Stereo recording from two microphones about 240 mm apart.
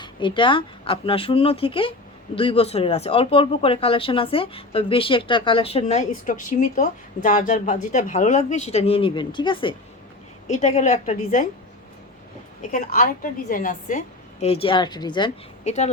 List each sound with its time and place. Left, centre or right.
0.0 s speech: centre
12.7 s a woman's voice: left